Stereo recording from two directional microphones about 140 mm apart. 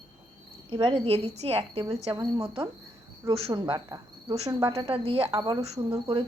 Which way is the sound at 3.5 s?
30° right (ahead or behind).